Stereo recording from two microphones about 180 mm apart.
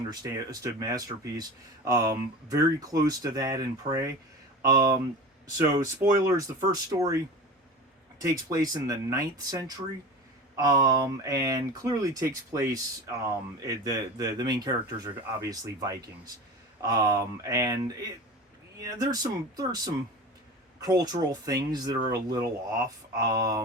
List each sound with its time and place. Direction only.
0.1 s speech: 20° right (ahead or behind)
8.2 s speech: 20° right (ahead or behind)